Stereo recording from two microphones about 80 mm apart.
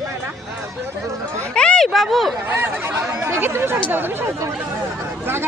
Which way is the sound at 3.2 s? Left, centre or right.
Right.